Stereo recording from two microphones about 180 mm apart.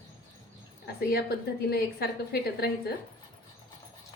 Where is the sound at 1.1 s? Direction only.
60° left (ahead or behind).